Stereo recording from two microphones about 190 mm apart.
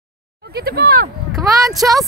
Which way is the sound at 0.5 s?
55° right (ahead or behind).